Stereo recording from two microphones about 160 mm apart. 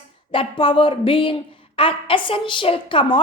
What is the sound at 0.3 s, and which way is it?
Speech, 35° left (ahead or behind).